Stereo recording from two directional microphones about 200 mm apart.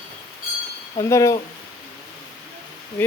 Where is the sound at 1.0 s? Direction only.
15° left (ahead or behind).